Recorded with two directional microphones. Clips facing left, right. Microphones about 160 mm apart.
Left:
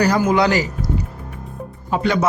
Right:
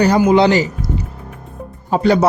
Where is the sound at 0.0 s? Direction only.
25° right (ahead or behind).